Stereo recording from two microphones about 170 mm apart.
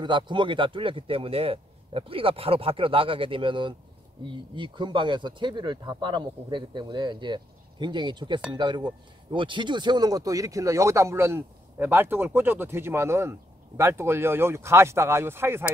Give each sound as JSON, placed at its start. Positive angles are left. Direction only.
{"t": 0.0, "sound": "a man's voice", "side_deg": -30}